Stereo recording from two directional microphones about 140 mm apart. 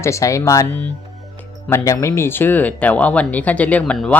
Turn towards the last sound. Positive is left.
turn(degrees=5)  # may be behind; listen again after turning